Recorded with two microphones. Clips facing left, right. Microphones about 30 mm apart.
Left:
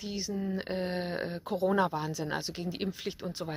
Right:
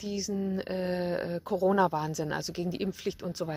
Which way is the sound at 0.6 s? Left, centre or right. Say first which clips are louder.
Right 2 dB; centre.